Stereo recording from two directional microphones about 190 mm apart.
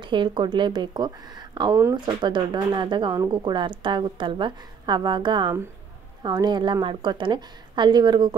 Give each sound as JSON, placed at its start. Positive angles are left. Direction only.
{"t": 0.0, "sound": "speech", "side_deg": -25}